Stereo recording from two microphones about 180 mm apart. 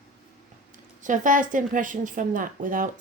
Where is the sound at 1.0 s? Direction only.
45° right (ahead or behind).